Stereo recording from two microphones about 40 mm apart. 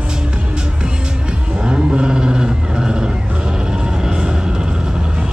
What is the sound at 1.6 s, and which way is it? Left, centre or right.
Vehicle, right.